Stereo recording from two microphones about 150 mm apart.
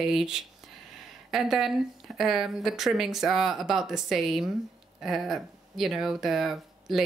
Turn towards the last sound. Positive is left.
turn(degrees=0)  # may be behind; listen again after turning